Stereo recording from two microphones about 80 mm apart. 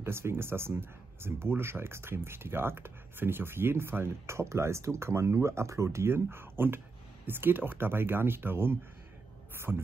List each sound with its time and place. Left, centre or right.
0.0 s speech: right
9.7 s speech: centre